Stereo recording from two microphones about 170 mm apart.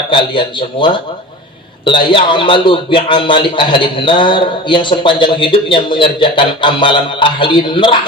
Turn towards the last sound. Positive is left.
turn(degrees=30)  # may be behind; listen again after turning